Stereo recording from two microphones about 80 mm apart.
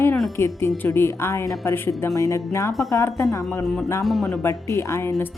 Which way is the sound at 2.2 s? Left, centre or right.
Left.